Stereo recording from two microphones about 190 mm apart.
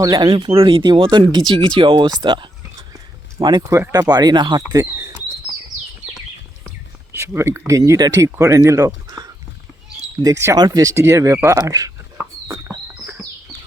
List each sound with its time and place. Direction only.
0.0 s speech: 20° right (ahead or behind)
6.7 s a sound: 15° right (ahead or behind)
7.7 s speech: 15° right (ahead or behind)